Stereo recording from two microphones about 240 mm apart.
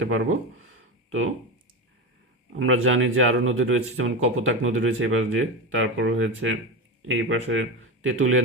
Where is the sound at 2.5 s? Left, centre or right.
Right.